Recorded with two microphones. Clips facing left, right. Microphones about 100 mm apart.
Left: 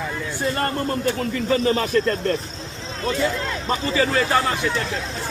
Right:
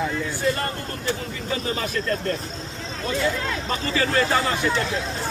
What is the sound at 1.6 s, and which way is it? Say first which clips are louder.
Speech: left 5 dB; 45° left (ahead or behind).